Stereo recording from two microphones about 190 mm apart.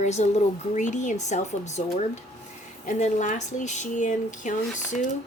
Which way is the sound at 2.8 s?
40° left (ahead or behind).